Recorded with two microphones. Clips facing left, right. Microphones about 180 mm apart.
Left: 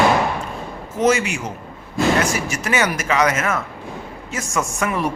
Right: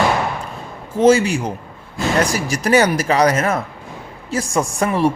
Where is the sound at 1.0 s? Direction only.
30° right (ahead or behind).